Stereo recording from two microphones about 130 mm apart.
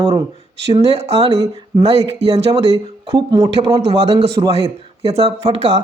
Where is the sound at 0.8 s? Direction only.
55° right (ahead or behind).